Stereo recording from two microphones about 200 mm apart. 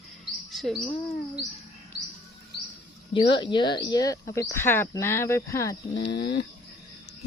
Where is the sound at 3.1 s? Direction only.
25° left (ahead or behind).